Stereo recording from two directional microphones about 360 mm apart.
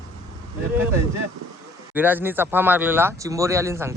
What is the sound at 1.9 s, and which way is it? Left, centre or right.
Speech, centre.